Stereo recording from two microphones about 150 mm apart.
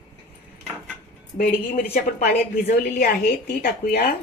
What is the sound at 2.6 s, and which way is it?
A woman's voice, 75° left (ahead or behind).